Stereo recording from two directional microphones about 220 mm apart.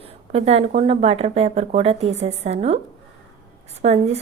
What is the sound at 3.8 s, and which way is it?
Speech, 30° right (ahead or behind).